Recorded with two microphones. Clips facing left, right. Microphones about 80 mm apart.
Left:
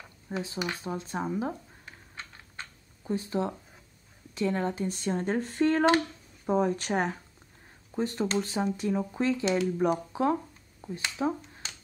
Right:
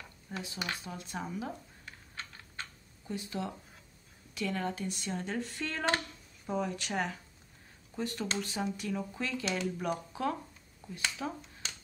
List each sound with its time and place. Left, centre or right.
0.3 s speech: left
1.9 s typing: centre
3.1 s speech: left